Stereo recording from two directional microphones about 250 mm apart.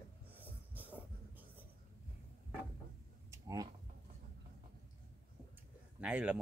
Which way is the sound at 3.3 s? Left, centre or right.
Centre.